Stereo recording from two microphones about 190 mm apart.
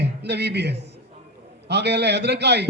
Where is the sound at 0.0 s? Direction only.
60° right (ahead or behind).